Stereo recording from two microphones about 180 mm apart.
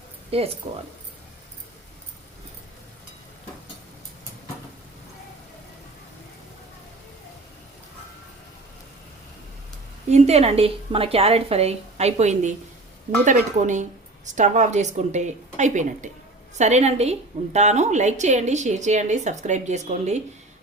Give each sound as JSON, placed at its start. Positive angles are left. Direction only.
{"t": 0.3, "sound": "speech", "side_deg": -35}
{"t": 10.1, "sound": "a woman's voice", "side_deg": -35}